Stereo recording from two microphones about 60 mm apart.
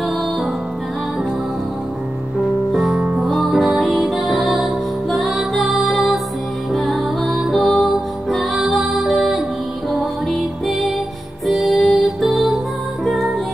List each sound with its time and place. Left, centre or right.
2.7 s music: centre